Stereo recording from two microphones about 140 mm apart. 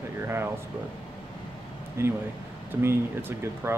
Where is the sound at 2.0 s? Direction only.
15° right (ahead or behind).